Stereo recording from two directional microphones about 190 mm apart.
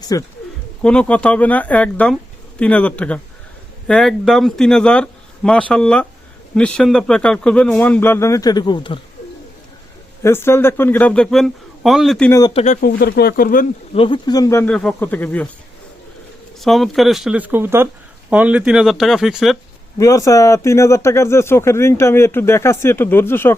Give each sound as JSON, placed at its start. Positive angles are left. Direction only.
{"t": 0.0, "sound": "speech", "side_deg": 20}
{"t": 0.8, "sound": "speech", "side_deg": 5}
{"t": 10.2, "sound": "speech", "side_deg": 15}
{"t": 12.5, "sound": "speech", "side_deg": 40}
{"t": 12.8, "sound": "speech", "side_deg": 55}
{"t": 13.9, "sound": "speech", "side_deg": 25}
{"t": 14.6, "sound": "speech", "side_deg": 5}
{"t": 16.6, "sound": "speech", "side_deg": 0}
{"t": 20.0, "sound": "speech", "side_deg": 15}